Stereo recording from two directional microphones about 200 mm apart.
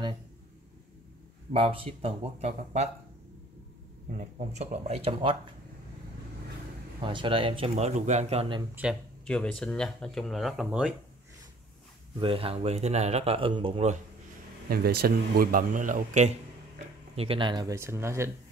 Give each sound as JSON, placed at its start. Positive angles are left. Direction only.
{"t": 1.5, "sound": "speech", "side_deg": -25}
{"t": 4.1, "sound": "speech", "side_deg": -40}
{"t": 7.0, "sound": "speech", "side_deg": -25}
{"t": 9.2, "sound": "speech", "side_deg": 5}
{"t": 12.2, "sound": "speech", "side_deg": -25}
{"t": 14.7, "sound": "speech", "side_deg": -50}